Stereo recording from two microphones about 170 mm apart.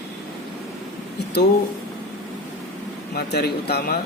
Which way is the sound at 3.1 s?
70° left (ahead or behind).